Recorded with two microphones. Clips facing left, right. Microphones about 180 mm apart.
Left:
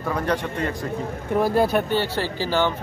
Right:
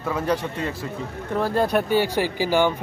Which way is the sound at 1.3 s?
10° left (ahead or behind).